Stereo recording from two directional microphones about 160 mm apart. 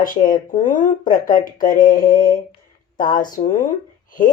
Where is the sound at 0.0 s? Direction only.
60° left (ahead or behind).